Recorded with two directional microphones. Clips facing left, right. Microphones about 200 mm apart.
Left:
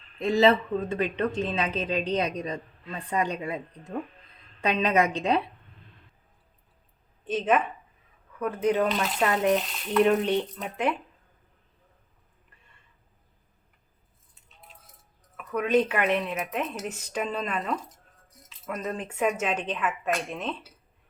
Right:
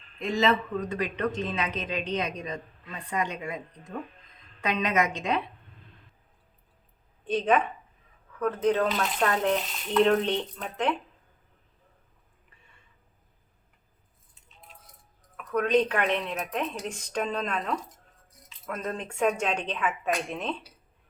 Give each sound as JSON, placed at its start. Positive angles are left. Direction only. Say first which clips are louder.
{"t": 0.2, "sound": "speech", "louder": "left 4 dB", "side_deg": 35}
{"t": 7.3, "sound": "speech", "louder": "even", "side_deg": 5}
{"t": 15.4, "sound": "speech", "louder": "even", "side_deg": 5}